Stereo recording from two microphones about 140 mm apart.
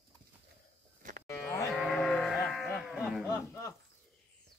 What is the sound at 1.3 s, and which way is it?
Livestock, 20° left (ahead or behind).